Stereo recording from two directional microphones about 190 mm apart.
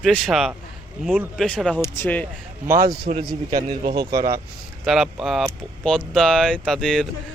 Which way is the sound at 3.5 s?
25° right (ahead or behind).